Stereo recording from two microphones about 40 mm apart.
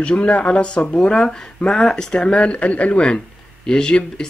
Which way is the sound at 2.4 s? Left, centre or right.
Left.